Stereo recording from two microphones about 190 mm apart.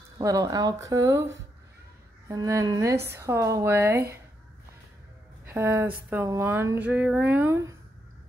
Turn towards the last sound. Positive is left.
turn(degrees=-10)  # may be behind; listen again after turning